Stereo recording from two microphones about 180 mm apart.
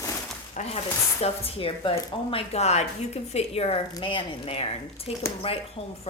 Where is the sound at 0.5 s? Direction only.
40° left (ahead or behind).